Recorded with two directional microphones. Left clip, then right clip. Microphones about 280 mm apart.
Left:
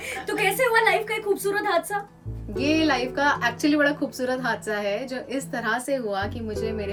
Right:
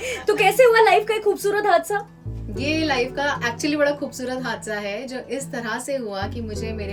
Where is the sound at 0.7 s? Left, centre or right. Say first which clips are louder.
Right 5 dB; centre.